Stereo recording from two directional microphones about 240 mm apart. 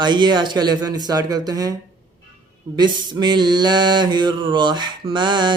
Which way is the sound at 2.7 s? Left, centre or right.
Centre.